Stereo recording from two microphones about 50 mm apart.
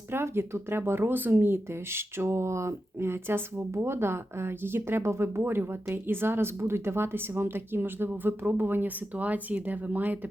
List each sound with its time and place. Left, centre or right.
0.1 s a woman's voice: right